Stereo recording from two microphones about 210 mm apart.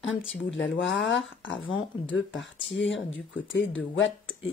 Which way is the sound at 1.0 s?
65° left (ahead or behind).